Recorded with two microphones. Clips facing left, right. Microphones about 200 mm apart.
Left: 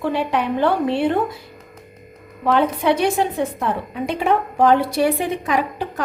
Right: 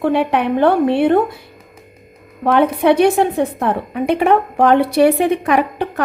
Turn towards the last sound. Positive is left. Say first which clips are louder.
# right 5 dB
turn(degrees=-65)  # may be behind; listen again after turning